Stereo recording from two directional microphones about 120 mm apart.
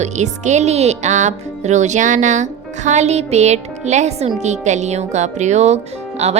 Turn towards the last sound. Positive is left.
turn(degrees=-65)  # may be behind; listen again after turning